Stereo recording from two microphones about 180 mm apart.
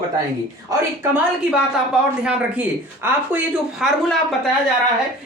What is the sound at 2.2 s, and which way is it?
Speech, 5° right (ahead or behind).